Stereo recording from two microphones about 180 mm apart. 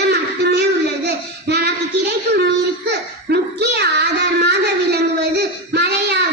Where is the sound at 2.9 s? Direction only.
70° right (ahead or behind).